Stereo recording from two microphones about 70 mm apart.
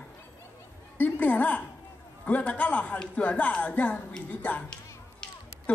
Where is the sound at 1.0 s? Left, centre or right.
Left.